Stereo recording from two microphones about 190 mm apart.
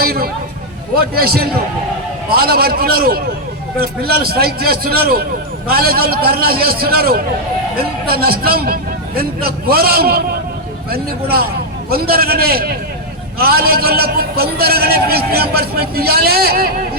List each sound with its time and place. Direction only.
0.0 s a man's voice: 55° right (ahead or behind)